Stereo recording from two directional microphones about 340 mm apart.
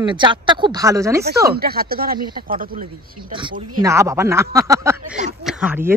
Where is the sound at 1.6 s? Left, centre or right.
Right.